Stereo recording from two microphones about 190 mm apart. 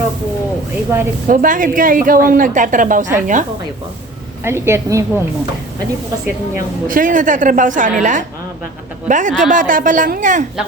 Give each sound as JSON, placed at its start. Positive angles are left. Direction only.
{"t": 0.9, "sound": "a woman's voice", "side_deg": -10}
{"t": 1.3, "sound": "a woman's voice", "side_deg": -45}
{"t": 4.4, "sound": "a woman's voice", "side_deg": -15}
{"t": 6.8, "sound": "a woman's voice", "side_deg": -45}